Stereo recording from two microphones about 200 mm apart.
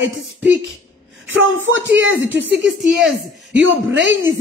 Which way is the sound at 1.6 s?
70° right (ahead or behind).